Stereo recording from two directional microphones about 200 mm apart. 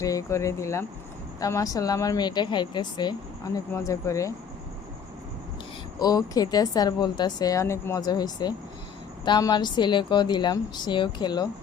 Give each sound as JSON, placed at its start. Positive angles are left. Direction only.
{"t": 0.0, "sound": "a woman's voice", "side_deg": 15}
{"t": 6.0, "sound": "a woman's voice", "side_deg": 20}